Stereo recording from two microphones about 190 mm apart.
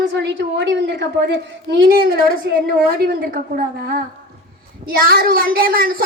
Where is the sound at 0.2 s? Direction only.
70° right (ahead or behind).